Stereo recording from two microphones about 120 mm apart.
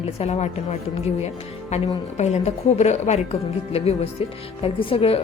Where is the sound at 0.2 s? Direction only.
65° left (ahead or behind).